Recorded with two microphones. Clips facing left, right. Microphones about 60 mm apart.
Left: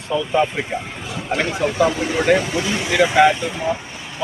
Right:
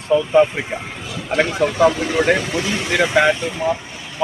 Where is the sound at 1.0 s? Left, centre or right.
Left.